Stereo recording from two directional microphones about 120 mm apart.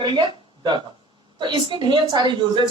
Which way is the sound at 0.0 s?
35° right (ahead or behind).